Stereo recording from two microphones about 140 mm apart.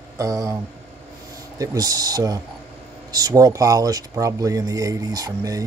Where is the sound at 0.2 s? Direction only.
25° right (ahead or behind).